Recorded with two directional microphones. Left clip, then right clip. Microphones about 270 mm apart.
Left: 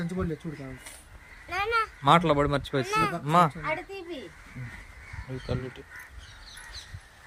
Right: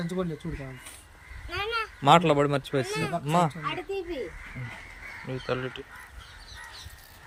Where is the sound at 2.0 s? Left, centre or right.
Centre.